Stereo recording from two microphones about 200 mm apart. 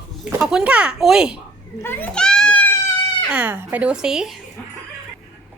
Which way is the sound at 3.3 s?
10° right (ahead or behind).